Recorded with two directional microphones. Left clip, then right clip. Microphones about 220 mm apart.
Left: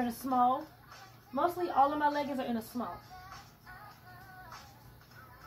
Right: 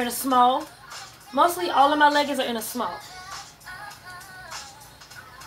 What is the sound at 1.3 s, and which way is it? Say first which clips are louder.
Speech: right 9 dB; 15° right (ahead or behind).